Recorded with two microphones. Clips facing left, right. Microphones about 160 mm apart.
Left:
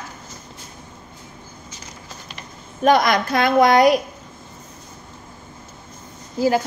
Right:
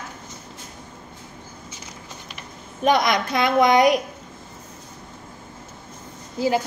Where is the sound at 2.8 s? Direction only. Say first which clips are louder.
Left 3 dB; 20° right (ahead or behind).